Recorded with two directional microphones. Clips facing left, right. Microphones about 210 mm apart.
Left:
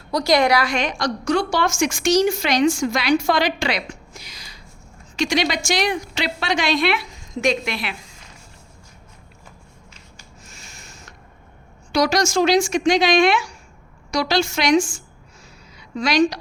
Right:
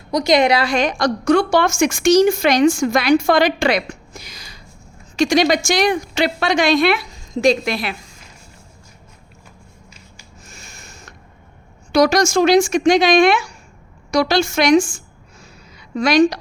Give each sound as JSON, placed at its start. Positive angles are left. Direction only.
{"t": 0.1, "sound": "a woman's voice", "side_deg": -20}
{"t": 0.9, "sound": "a woman's voice", "side_deg": -55}
{"t": 4.3, "sound": "a sound", "side_deg": -50}
{"t": 5.1, "sound": "a woman's voice", "side_deg": -45}
{"t": 10.5, "sound": "a sound", "side_deg": -45}
{"t": 11.9, "sound": "a woman's voice", "side_deg": -50}
{"t": 16.0, "sound": "a woman's voice", "side_deg": -55}